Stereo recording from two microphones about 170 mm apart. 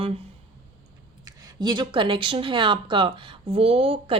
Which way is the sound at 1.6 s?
25° right (ahead or behind).